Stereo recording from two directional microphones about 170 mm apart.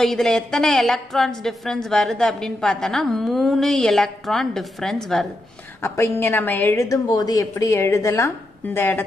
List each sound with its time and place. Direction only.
0.0 s a woman's voice: 5° left (ahead or behind)
5.8 s a woman's voice: 15° left (ahead or behind)